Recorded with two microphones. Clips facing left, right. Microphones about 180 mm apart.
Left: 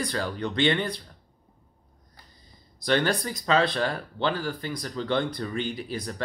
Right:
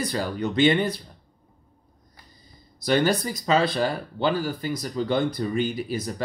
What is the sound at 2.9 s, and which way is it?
Speech, 5° right (ahead or behind).